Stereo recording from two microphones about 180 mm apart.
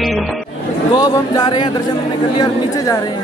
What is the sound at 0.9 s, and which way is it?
A woman's voice, 20° left (ahead or behind).